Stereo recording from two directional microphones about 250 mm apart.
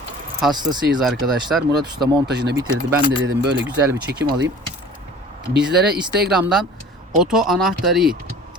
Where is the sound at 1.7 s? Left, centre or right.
Centre.